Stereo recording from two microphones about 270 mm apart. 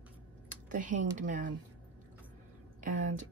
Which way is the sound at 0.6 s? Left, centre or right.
Right.